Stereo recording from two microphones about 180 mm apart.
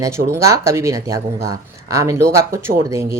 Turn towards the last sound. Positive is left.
turn(degrees=-15)  # may be behind; listen again after turning